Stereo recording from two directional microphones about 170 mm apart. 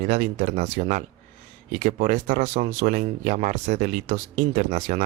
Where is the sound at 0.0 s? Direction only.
45° right (ahead or behind).